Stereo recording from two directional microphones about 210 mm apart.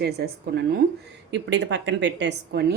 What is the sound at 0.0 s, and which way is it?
A woman's voice, 50° right (ahead or behind).